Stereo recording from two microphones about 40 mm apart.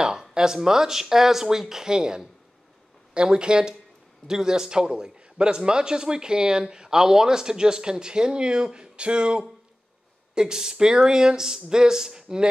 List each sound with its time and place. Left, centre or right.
0.0 s a man's voice: centre